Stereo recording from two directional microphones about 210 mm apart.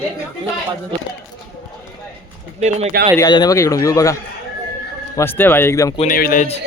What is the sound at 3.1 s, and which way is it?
Speech, 20° left (ahead or behind).